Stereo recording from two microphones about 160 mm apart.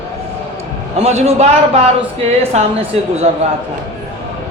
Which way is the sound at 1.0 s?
40° right (ahead or behind).